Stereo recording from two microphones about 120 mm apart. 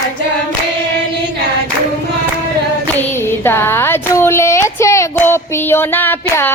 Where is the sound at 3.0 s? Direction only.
20° left (ahead or behind).